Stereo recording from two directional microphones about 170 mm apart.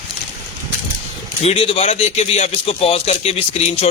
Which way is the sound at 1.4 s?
35° left (ahead or behind).